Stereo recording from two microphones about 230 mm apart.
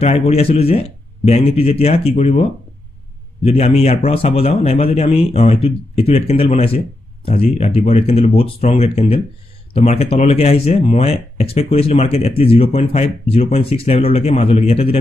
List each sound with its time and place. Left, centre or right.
0.0 s speech: left
3.4 s speech: left